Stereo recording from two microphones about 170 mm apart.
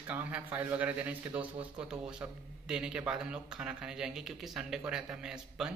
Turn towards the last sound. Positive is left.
turn(degrees=-5)  # may be behind; listen again after turning